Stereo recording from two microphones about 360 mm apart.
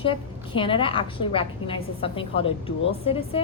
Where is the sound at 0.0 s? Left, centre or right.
Centre.